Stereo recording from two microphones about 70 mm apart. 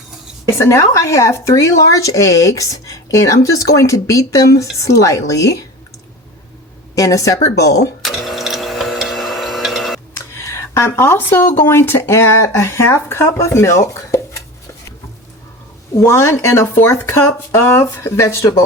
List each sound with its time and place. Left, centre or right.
0.6 s speech: left
6.9 s speech: left
8.0 s a sound: centre
10.2 s a sound: left
11.7 s speech: left
16.0 s speech: left